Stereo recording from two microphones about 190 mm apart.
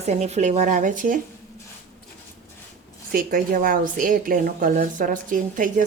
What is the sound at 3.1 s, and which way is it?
A woman's voice, 50° right (ahead or behind).